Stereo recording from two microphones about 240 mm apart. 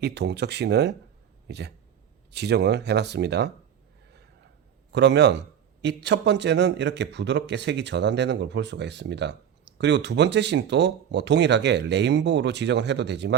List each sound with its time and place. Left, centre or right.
0.0 s a man's voice: right
4.9 s a man's voice: right